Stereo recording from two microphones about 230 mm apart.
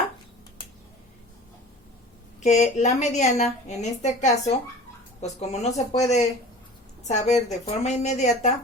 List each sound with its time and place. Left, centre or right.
2.4 s a woman's voice: left